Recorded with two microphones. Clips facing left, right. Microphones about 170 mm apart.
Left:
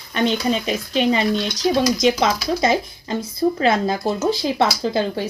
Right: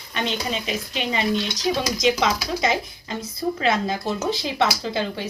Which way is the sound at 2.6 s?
35° left (ahead or behind).